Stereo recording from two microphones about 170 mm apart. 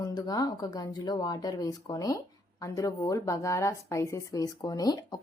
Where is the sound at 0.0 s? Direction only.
20° left (ahead or behind).